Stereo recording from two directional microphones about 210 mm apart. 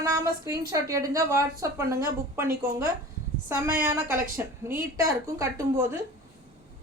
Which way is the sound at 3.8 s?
10° right (ahead or behind).